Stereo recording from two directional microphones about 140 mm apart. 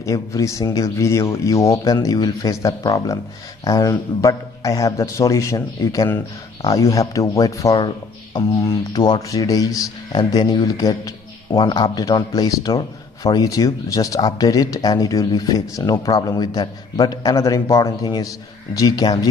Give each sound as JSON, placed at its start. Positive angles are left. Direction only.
{"t": 0.0, "sound": "speech", "side_deg": 20}